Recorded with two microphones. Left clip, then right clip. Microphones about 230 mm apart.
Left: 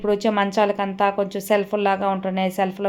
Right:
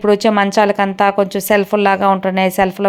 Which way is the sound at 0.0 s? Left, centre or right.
Centre.